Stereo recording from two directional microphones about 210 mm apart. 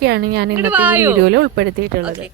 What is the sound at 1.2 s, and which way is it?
Speech, 60° right (ahead or behind).